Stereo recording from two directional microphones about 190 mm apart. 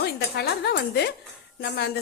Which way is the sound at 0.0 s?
60° left (ahead or behind).